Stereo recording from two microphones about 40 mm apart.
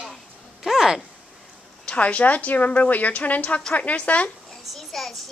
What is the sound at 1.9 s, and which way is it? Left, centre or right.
A woman's voice, left.